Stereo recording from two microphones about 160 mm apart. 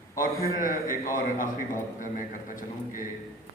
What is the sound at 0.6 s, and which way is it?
A man's voice, 60° left (ahead or behind).